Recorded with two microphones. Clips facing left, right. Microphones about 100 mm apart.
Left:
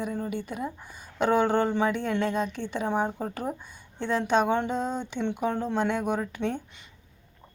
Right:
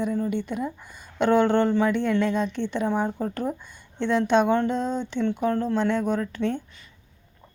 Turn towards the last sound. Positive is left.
turn(degrees=20)  # may be behind; listen again after turning